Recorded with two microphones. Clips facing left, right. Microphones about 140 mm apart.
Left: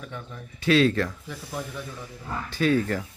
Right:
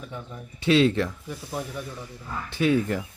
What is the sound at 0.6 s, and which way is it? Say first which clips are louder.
Speech: right 1 dB; 25° right (ahead or behind).